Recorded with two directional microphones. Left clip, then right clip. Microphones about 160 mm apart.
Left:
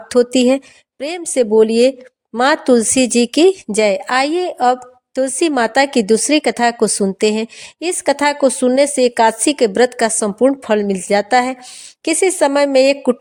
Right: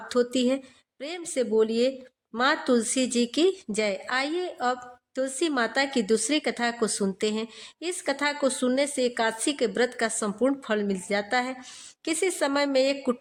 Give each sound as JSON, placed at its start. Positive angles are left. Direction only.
{"t": 0.1, "sound": "a woman's voice", "side_deg": 45}